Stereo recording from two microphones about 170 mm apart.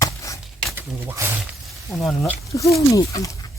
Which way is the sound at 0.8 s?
15° right (ahead or behind).